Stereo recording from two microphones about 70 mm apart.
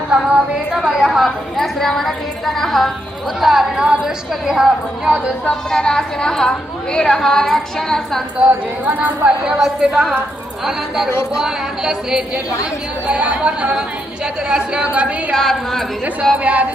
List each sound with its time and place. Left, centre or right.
0.1 s a woman's voice: centre
5.0 s a woman's voice: centre
5.5 s a woman's voice: centre
8.4 s speech: right
9.4 s a woman's voice: centre
15.3 s a woman's voice: centre
16.4 s speech: right